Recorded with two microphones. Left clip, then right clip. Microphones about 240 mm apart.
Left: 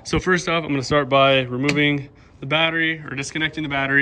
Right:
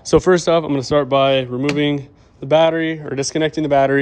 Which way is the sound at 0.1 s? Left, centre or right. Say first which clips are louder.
Right 7 dB; right.